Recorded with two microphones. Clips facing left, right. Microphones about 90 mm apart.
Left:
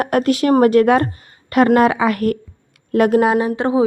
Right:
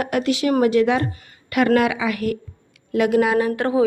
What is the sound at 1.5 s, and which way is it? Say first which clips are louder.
Speech: left 5 dB; 35° left (ahead or behind).